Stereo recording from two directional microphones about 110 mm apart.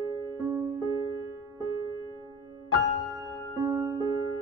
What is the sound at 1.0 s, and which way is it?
Music, 30° right (ahead or behind).